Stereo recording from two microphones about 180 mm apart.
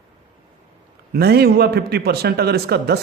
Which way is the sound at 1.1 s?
60° right (ahead or behind).